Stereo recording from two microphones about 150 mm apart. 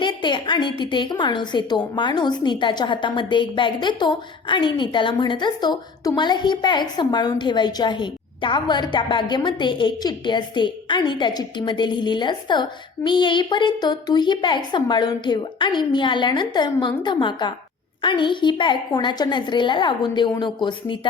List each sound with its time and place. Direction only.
0.0 s a woman's voice: 30° left (ahead or behind)